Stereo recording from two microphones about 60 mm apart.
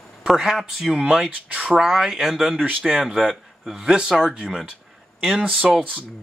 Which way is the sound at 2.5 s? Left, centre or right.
Right.